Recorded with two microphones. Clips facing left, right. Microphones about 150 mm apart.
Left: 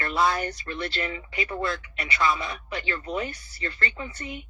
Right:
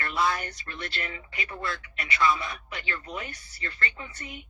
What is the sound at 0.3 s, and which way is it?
Speech, 30° left (ahead or behind).